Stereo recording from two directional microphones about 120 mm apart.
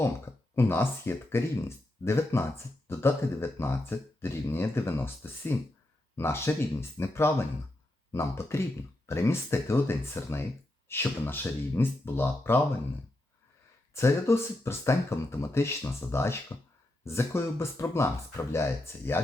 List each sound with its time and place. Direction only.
0.5 s speech: 20° left (ahead or behind)
13.9 s speech: 20° left (ahead or behind)